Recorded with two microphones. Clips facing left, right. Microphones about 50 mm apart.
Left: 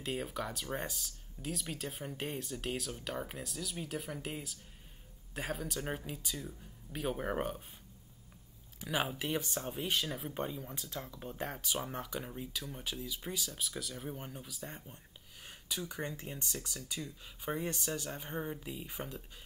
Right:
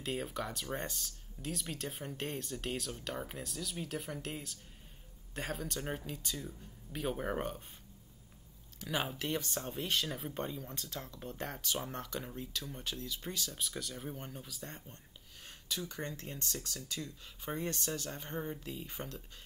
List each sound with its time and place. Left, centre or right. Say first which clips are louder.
0.0 s speech: even; centre
8.7 s speech: left 2 dB; centre